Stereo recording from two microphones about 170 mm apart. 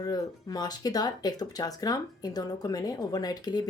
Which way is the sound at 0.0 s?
20° left (ahead or behind).